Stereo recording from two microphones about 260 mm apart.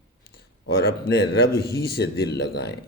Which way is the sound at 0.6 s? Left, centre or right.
Left.